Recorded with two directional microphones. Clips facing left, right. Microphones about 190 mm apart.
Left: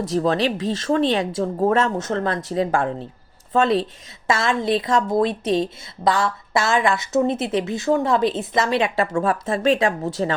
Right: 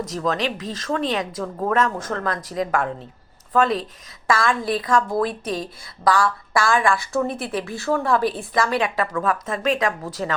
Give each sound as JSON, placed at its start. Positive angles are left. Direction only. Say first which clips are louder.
{"t": 0.0, "sound": "speech", "louder": "left 4 dB", "side_deg": 30}